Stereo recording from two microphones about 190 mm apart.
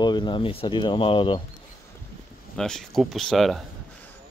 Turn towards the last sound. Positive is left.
turn(degrees=0)  # may be behind; listen again after turning